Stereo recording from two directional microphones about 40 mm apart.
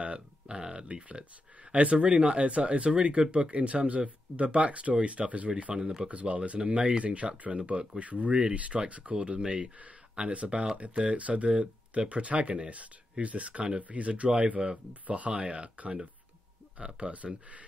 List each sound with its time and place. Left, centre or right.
0.0 s a sound: right
1.7 s speech: right
5.7 s speech: centre
6.0 s speech: right
15.0 s speech: right